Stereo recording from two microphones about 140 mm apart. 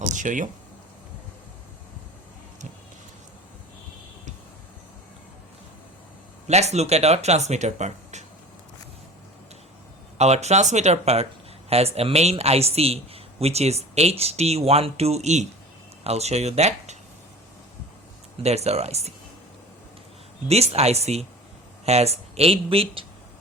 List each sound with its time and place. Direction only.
0.0 s a sound: 65° right (ahead or behind)
6.5 s a man's voice: 50° right (ahead or behind)
10.2 s a man's voice: 50° right (ahead or behind)
18.4 s a man's voice: 50° right (ahead or behind)
20.5 s a man's voice: 50° right (ahead or behind)